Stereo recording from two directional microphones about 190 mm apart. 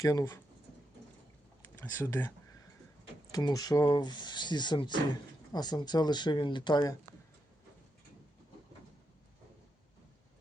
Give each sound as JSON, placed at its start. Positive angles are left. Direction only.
{"t": 0.0, "sound": "speech", "side_deg": 20}
{"t": 1.8, "sound": "speech", "side_deg": 15}
{"t": 3.3, "sound": "speech", "side_deg": 20}